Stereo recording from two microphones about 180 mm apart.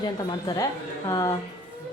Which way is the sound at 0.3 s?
20° left (ahead or behind).